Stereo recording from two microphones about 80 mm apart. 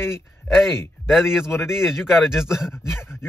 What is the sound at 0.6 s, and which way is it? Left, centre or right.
Speech, centre.